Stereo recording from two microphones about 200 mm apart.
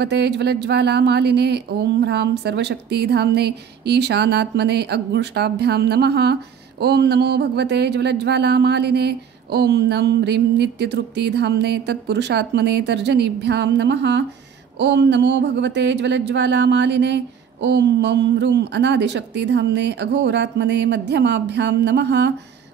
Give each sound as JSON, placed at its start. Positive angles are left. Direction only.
{"t": 0.0, "sound": "speech", "side_deg": -60}